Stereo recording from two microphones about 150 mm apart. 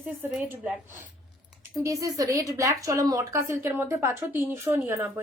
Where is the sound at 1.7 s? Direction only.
20° right (ahead or behind).